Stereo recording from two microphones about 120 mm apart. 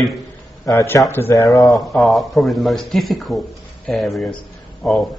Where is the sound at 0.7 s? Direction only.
25° left (ahead or behind).